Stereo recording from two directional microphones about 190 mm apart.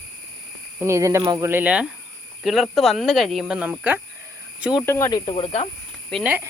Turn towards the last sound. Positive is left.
turn(degrees=0)  # may be behind; listen again after turning